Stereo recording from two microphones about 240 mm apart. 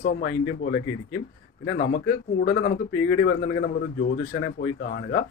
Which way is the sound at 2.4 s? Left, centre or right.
Left.